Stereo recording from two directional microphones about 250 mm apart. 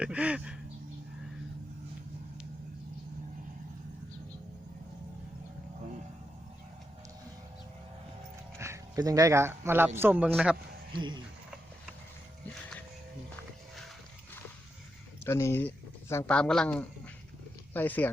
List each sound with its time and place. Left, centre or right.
0.0 s a sound: centre
8.5 s speech: centre
13.3 s music: centre
15.2 s speech: centre